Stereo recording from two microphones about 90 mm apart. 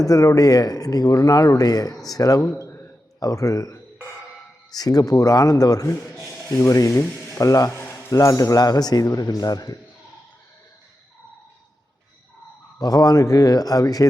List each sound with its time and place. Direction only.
0.0 s speech: 40° left (ahead or behind)
2.4 s a sound: 30° left (ahead or behind)
3.2 s speech: 40° left (ahead or behind)
6.5 s speech: 35° left (ahead or behind)
12.8 s speech: 45° left (ahead or behind)